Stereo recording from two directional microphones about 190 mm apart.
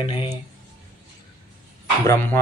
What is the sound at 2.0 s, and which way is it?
Speech, 15° left (ahead or behind).